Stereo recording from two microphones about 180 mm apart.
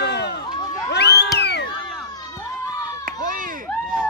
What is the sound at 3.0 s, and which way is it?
Chop, 50° right (ahead or behind).